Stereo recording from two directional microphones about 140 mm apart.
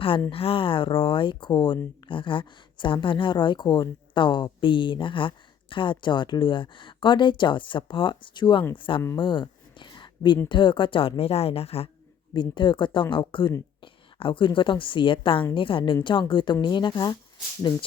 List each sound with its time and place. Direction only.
0.3 s speech: 40° left (ahead or behind)
9.1 s a sound: 35° left (ahead or behind)
10.5 s speech: 35° left (ahead or behind)
12.3 s speech: 35° left (ahead or behind)